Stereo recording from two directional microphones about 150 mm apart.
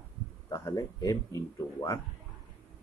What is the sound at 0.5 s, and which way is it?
Speech, 20° left (ahead or behind).